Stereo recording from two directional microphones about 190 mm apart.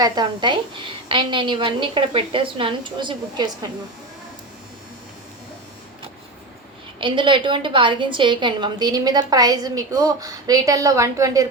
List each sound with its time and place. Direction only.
0.0 s a woman's voice: 20° right (ahead or behind)
7.0 s a woman's voice: 25° right (ahead or behind)